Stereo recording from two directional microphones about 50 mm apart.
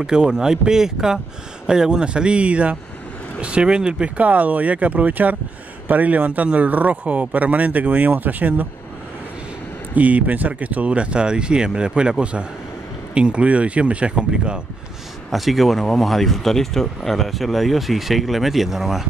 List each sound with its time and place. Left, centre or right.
0.0 s speech: centre; by 8.6 s right
9.9 s speech: right
15.3 s speech: centre